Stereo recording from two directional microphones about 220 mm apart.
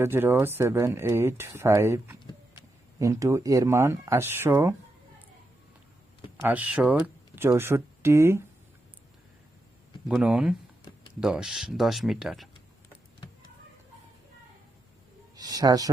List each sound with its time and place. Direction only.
0.0 s speech: 10° right (ahead or behind)
6.3 s speech: 10° right (ahead or behind)
10.1 s speech: 5° right (ahead or behind)
15.4 s a sound: 15° right (ahead or behind)